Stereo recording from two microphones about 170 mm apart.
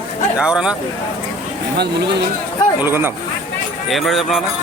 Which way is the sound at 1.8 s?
80° right.